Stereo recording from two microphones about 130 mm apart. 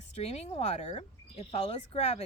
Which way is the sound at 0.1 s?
55° left (ahead or behind).